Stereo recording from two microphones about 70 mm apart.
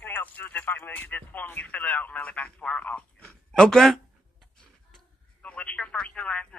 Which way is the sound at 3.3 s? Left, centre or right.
Centre.